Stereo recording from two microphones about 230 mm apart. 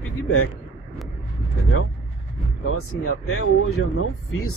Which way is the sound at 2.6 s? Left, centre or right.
Left.